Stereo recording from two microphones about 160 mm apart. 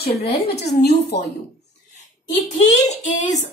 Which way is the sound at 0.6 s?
90° left.